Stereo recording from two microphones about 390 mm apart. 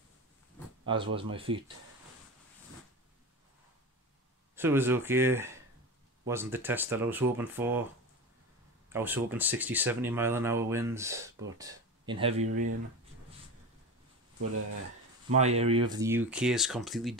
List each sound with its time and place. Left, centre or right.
0.8 s speech: centre
4.6 s speech: centre
12.4 s speech: right
15.3 s speech: centre